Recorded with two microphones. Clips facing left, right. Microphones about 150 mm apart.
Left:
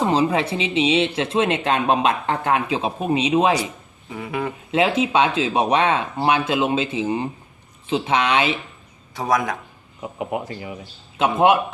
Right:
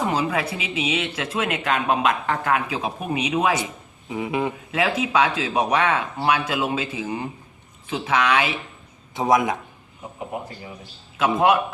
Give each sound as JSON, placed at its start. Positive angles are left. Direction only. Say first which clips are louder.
{"t": 0.0, "sound": "a sound", "louder": "left 4 dB", "side_deg": 30}
{"t": 0.5, "sound": "speech", "louder": "left 6 dB", "side_deg": 30}
{"t": 4.1, "sound": "a sound", "louder": "right 2 dB", "side_deg": -20}
{"t": 4.7, "sound": "speech", "louder": "left 5 dB", "side_deg": 25}
{"t": 9.1, "sound": "a man's voice", "louder": "right 2 dB", "side_deg": -20}
{"t": 10.3, "sound": "speech", "louder": "left 5 dB", "side_deg": 90}
{"t": 11.2, "sound": "speech", "louder": "left 2 dB", "side_deg": 25}